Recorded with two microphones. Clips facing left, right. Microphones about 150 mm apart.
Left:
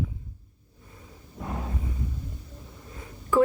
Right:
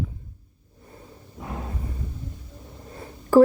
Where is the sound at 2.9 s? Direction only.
35° right (ahead or behind).